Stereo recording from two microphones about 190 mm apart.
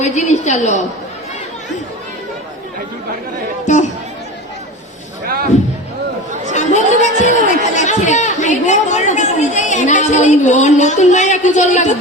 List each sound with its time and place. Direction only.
0.0 s a woman's voice: 40° left (ahead or behind)
5.2 s speech: 50° right (ahead or behind)
6.7 s speech: 40° left (ahead or behind)